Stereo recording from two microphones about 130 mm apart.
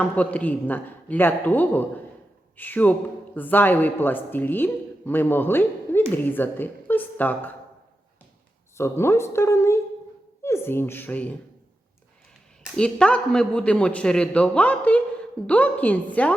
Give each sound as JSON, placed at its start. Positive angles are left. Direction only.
{"t": 0.0, "sound": "speech", "side_deg": 10}
{"t": 8.8, "sound": "a woman's voice", "side_deg": 20}
{"t": 12.7, "sound": "speech", "side_deg": 5}